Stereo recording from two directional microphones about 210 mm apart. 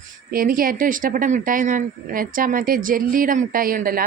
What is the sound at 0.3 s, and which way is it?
Speech, 45° right (ahead or behind).